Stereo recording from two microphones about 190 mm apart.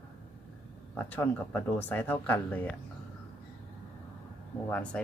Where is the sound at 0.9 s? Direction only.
10° left (ahead or behind).